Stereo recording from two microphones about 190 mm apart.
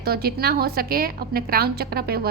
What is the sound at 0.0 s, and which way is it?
A woman's voice, 55° right (ahead or behind).